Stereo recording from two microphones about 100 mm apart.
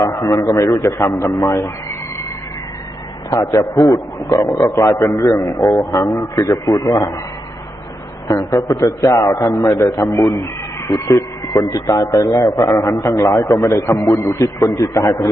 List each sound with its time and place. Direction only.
0.0 s a man's voice: 40° left (ahead or behind)
3.2 s a man's voice: 35° left (ahead or behind)
8.3 s a man's voice: 40° left (ahead or behind)
10.4 s a man's voice: 30° left (ahead or behind)